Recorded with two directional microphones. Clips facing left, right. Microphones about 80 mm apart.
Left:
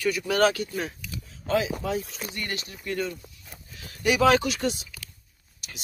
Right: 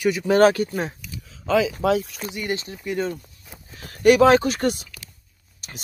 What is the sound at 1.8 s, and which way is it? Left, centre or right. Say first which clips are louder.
Speech: right 9 dB; right.